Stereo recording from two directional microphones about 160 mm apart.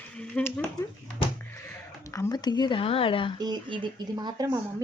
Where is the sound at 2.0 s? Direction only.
20° left (ahead or behind).